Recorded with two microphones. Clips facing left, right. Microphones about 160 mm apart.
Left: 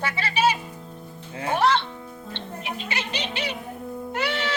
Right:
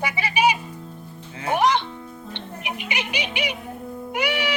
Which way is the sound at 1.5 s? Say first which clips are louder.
Right 1 dB; 15° right (ahead or behind).